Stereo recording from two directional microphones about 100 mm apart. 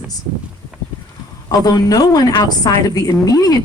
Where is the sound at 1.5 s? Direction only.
40° left (ahead or behind).